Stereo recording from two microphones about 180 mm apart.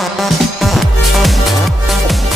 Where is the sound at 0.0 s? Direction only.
Centre (ahead or behind).